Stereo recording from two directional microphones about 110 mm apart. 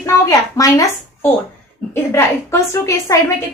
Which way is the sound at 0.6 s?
30° left (ahead or behind).